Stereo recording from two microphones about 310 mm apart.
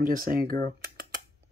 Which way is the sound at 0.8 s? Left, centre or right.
Right.